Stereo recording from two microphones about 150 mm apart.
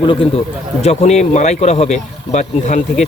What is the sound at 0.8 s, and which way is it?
Speech, 45° left (ahead or behind).